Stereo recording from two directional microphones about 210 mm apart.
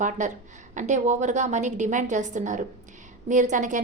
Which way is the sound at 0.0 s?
35° right (ahead or behind).